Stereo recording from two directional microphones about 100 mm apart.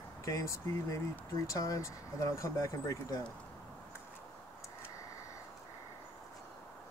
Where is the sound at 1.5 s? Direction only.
35° left (ahead or behind).